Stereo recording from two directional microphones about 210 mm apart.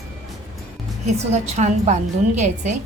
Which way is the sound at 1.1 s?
30° right (ahead or behind).